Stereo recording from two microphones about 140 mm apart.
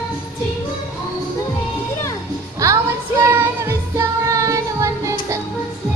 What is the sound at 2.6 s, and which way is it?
Music, 20° right (ahead or behind).